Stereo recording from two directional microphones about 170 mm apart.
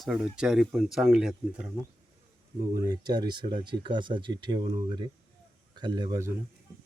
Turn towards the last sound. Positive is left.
turn(degrees=-20)  # may be behind; listen again after turning